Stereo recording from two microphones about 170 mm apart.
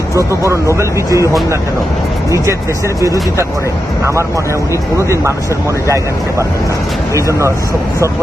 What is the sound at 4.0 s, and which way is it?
Speech, 15° right (ahead or behind).